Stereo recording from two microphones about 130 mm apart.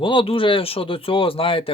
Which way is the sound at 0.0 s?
40° left (ahead or behind).